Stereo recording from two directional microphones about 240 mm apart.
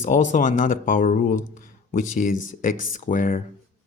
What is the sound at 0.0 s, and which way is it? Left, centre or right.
Speech, left.